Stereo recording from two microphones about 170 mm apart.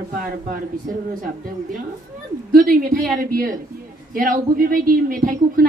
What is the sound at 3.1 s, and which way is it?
A woman's voice, 55° right (ahead or behind).